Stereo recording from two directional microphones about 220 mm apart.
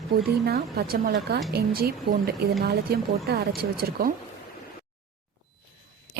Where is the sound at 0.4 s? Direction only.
45° right (ahead or behind).